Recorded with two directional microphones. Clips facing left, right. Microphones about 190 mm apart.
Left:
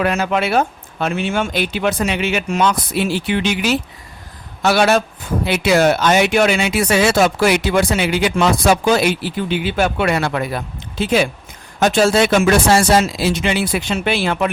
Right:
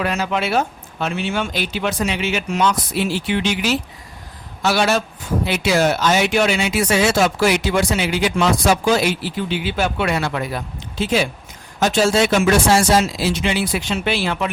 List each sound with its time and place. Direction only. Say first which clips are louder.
0.0 s speech: left 3 dB; 55° left (ahead or behind)